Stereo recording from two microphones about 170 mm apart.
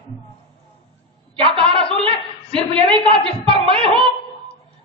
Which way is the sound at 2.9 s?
30° right (ahead or behind).